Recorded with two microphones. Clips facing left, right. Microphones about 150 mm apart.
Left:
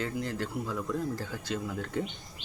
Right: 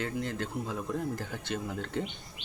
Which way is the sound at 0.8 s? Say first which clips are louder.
Left 1 dB; 20° right (ahead or behind).